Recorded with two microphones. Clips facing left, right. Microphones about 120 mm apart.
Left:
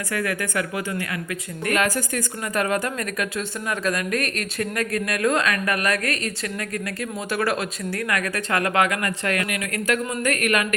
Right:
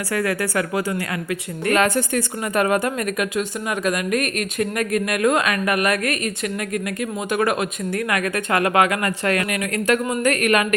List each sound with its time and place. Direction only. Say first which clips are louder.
0.1 s speech: right 4 dB; 35° right (ahead or behind)